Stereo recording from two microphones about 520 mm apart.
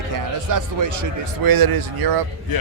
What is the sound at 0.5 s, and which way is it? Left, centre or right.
Speech, right.